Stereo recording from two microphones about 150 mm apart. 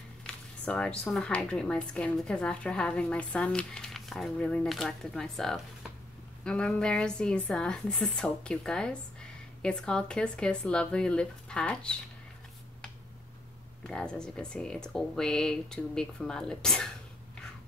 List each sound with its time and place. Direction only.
0.3 s a woman's voice: 5° left (ahead or behind)
13.8 s speech: 5° left (ahead or behind)